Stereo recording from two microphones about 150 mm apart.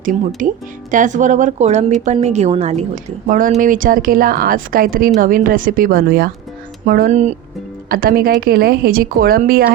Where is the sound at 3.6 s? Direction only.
65° right (ahead or behind); by 6.3 s 85° right.